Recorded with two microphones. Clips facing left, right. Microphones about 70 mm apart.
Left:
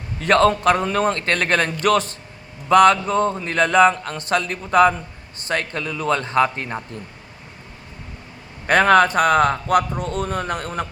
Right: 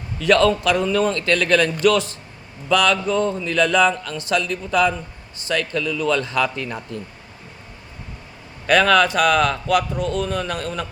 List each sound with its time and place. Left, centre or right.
0.2 s a man's voice: left
8.6 s speech: left